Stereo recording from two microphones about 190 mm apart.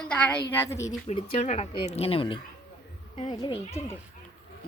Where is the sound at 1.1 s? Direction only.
35° left (ahead or behind).